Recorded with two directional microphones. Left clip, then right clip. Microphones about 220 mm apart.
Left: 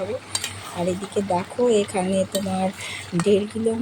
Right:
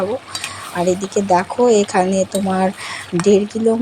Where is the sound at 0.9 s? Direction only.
20° right (ahead or behind).